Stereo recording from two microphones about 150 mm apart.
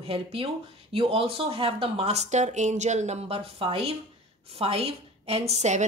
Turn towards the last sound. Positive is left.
turn(degrees=-50)  # may be behind; listen again after turning